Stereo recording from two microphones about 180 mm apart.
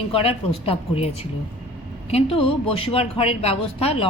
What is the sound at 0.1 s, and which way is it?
Speech, 30° left (ahead or behind).